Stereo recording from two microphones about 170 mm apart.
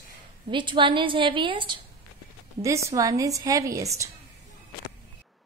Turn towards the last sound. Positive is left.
turn(degrees=-20)  # may be behind; listen again after turning